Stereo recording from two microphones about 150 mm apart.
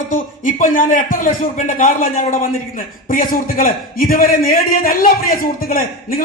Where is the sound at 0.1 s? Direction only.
60° left (ahead or behind).